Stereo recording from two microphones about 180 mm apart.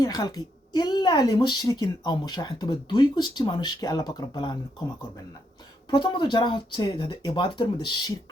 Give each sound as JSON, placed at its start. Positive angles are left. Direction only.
{"t": 0.0, "sound": "a woman's voice", "side_deg": 20}
{"t": 5.9, "sound": "a woman's voice", "side_deg": 25}